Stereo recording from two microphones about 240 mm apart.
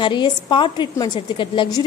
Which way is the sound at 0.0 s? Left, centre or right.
Centre.